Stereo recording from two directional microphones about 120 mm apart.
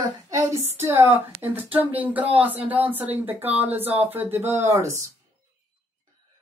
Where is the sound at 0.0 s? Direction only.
25° right (ahead or behind).